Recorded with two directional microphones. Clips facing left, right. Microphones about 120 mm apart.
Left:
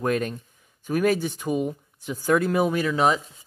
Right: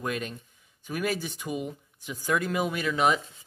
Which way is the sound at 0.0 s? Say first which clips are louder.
Left 8 dB; 45° left (ahead or behind).